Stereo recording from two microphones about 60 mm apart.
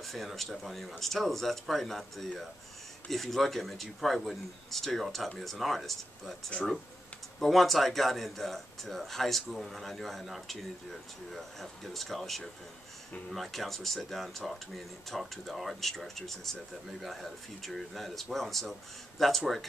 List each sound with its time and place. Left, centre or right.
0.0 s speech: centre
7.3 s speech: centre